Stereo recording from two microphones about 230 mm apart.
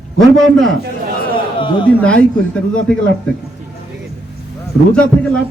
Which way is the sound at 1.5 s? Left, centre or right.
Left.